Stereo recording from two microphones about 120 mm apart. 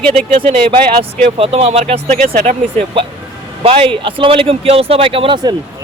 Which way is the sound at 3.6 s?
50° right (ahead or behind).